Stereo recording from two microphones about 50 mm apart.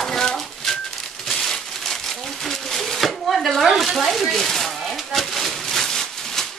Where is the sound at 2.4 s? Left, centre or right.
Centre.